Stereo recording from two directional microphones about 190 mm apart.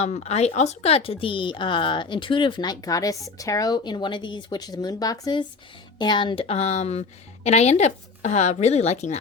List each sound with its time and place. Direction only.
0.0 s a woman's voice: 35° left (ahead or behind)